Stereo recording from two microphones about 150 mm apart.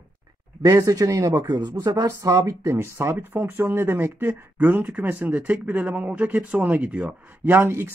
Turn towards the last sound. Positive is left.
turn(degrees=-15)  # may be behind; listen again after turning